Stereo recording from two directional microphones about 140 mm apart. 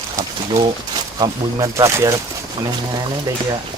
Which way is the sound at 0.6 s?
30° right (ahead or behind).